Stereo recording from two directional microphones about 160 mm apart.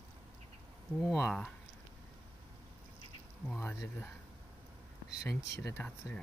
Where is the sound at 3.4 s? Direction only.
10° left (ahead or behind).